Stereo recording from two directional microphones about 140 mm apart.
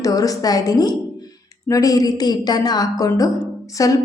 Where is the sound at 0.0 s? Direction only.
25° left (ahead or behind).